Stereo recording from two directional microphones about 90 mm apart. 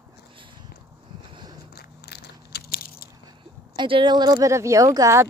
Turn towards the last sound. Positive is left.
turn(degrees=-35)  # may be behind; listen again after turning